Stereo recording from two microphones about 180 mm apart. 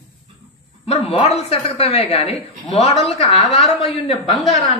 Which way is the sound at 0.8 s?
35° left (ahead or behind).